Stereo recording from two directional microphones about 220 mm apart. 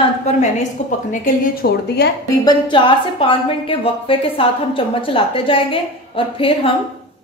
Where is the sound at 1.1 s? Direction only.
40° left (ahead or behind).